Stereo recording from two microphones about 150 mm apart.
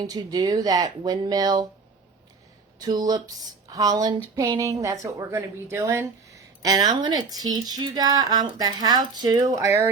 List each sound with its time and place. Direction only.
0.0 s speech: 25° right (ahead or behind)
2.7 s speech: 25° right (ahead or behind)